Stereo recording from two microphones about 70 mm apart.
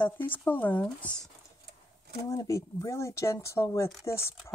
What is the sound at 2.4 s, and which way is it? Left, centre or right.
Speech, left.